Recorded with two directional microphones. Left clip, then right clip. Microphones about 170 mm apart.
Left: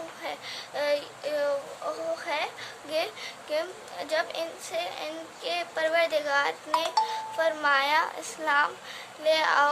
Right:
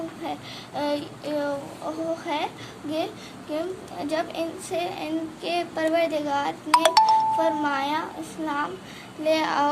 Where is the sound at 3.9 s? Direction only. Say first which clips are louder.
Right 1 dB; 10° left (ahead or behind).